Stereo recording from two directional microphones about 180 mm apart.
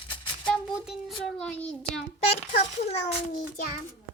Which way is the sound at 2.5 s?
35° left (ahead or behind).